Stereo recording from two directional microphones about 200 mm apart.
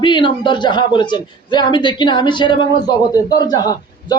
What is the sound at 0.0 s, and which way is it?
A man's voice, 25° left (ahead or behind).